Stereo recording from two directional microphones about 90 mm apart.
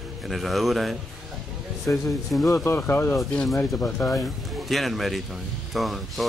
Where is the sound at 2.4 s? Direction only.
30° left (ahead or behind).